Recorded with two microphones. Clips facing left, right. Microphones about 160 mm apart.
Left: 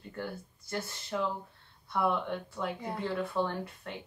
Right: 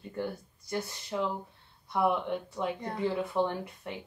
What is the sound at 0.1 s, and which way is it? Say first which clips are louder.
Speech: right 4 dB; 15° right (ahead or behind).